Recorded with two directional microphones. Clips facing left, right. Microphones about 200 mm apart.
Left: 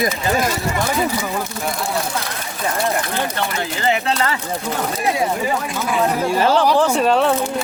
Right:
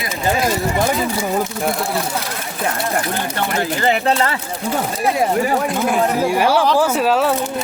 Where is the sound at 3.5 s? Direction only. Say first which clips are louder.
Right 4 dB; 50° right (ahead or behind).